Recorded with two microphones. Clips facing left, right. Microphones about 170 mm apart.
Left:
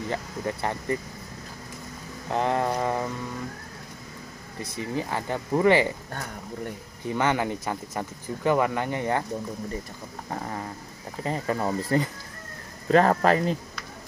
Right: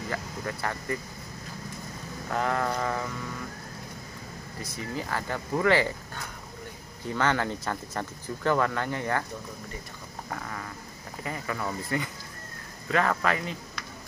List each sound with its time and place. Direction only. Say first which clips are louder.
0.1 s speech: left 3 dB; 25° left (ahead or behind)
2.2 s speech: left 3 dB; 25° left (ahead or behind)
4.9 s speech: left 3 dB; 20° left (ahead or behind)
7.1 s speech: left 2 dB; 15° left (ahead or behind)
10.3 s speech: left 5 dB; 30° left (ahead or behind)